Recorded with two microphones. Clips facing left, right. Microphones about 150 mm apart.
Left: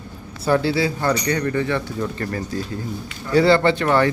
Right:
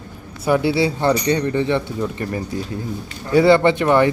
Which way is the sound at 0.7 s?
25° right (ahead or behind).